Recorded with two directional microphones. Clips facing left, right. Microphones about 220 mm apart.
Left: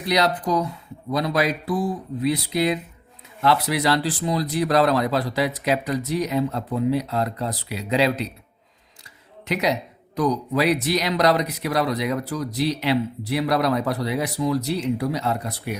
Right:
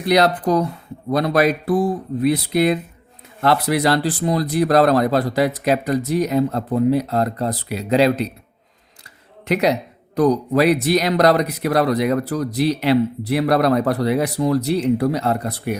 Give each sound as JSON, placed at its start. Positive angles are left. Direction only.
{"t": 0.0, "sound": "speech", "side_deg": -55}
{"t": 9.5, "sound": "speech", "side_deg": -55}